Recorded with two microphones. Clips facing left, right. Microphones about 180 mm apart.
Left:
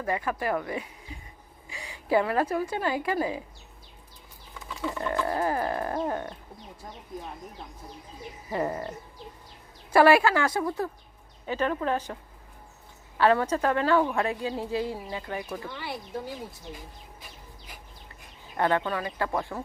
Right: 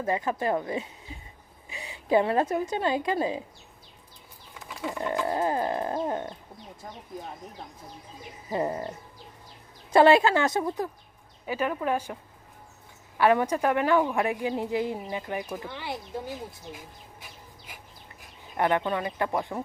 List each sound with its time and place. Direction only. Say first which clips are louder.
0.0 s a woman's voice: right 2 dB; 25° right (ahead or behind)
4.9 s a woman's voice: even; 15° right (ahead or behind)
8.4 s a woman's voice: right 1 dB; 20° right (ahead or behind)
9.9 s a woman's voice: right 1 dB; 25° right (ahead or behind)
11.4 s a woman's voice: even; 10° right (ahead or behind)
13.1 s a woman's voice: even; 15° right (ahead or behind)
18.5 s a woman's voice: right 1 dB; 20° right (ahead or behind)